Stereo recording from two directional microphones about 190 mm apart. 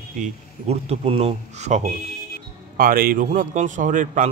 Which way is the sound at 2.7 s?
50° right (ahead or behind).